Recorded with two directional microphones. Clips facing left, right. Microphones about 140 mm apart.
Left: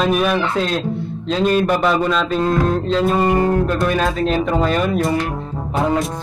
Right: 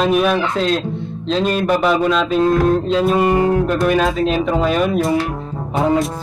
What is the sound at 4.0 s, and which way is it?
A man's voice, centre (ahead or behind).